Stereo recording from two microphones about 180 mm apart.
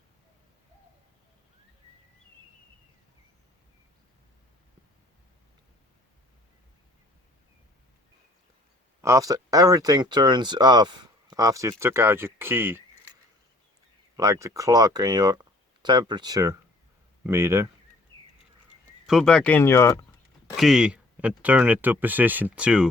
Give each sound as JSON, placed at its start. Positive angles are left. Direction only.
{"t": 9.0, "sound": "speech", "side_deg": -15}
{"t": 14.2, "sound": "speech", "side_deg": -20}
{"t": 19.0, "sound": "speech", "side_deg": 0}
{"t": 20.6, "sound": "speech", "side_deg": -5}